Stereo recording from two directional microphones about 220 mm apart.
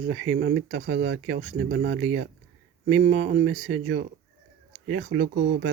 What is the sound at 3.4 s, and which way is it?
Speech, 70° right (ahead or behind).